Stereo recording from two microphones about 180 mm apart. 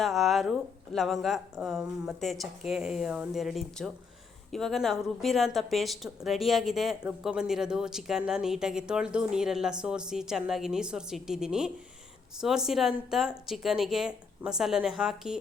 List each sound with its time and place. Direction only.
0.0 s speech: centre (ahead or behind)